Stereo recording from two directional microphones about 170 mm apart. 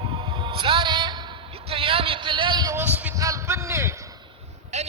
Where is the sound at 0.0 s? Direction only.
30° right (ahead or behind).